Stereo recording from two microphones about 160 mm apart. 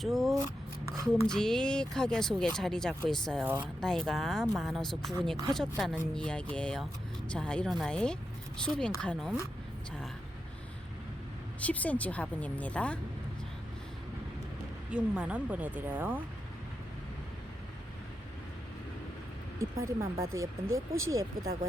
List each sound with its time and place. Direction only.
0.0 s speech: centre (ahead or behind)
11.6 s speech: 10° left (ahead or behind)
14.8 s speech: 5° right (ahead or behind)
19.5 s speech: 20° right (ahead or behind)